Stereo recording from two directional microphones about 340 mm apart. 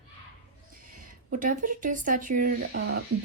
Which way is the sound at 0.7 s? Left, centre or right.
Right.